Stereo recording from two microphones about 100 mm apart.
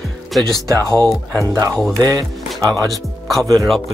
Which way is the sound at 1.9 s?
35° right (ahead or behind).